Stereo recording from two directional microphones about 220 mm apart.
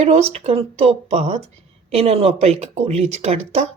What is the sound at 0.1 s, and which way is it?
Speech, 30° right (ahead or behind).